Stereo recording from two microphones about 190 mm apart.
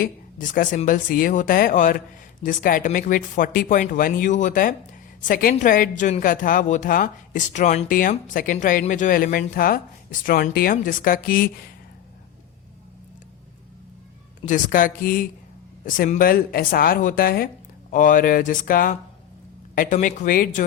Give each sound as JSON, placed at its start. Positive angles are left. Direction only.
{"t": 0.0, "sound": "a woman's voice", "side_deg": 45}
{"t": 14.4, "sound": "a woman's voice", "side_deg": 45}